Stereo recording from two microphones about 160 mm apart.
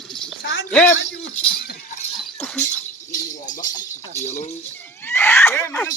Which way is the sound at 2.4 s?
5° left (ahead or behind).